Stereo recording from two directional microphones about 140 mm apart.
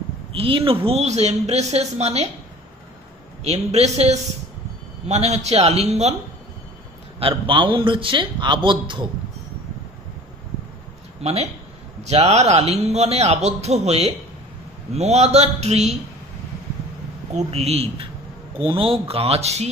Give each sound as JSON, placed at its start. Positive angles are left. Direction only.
{"t": 0.3, "sound": "speech", "side_deg": -40}
{"t": 3.4, "sound": "speech", "side_deg": -50}
{"t": 7.2, "sound": "a man's voice", "side_deg": -40}
{"t": 12.0, "sound": "speech", "side_deg": -50}
{"t": 17.3, "sound": "speech", "side_deg": -50}